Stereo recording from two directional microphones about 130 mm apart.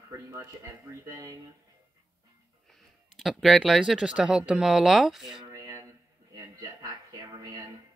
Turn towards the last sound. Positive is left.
turn(degrees=-25)  # may be behind; listen again after turning